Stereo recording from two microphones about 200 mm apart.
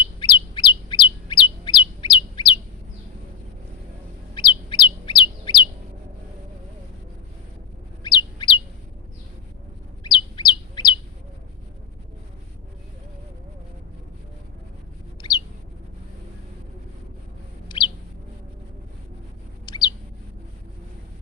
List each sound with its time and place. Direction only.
0.2 s bird: 20° left (ahead or behind)
4.4 s bird: 25° left (ahead or behind)
8.0 s chirp: 20° left (ahead or behind)
10.0 s bird: 20° left (ahead or behind)
15.2 s bird: 20° left (ahead or behind)
17.7 s bird: 25° left (ahead or behind)
19.6 s bird: 20° left (ahead or behind)